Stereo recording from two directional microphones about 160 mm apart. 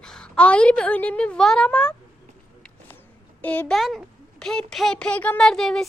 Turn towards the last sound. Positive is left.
turn(degrees=5)  # may be behind; listen again after turning